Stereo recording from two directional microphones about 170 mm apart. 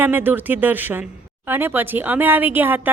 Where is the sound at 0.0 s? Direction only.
10° right (ahead or behind).